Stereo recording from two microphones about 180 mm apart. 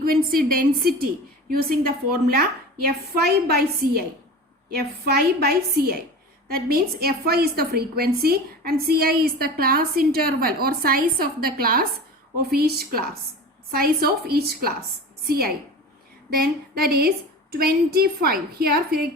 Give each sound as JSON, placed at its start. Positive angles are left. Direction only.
{"t": 0.0, "sound": "a woman's voice", "side_deg": -55}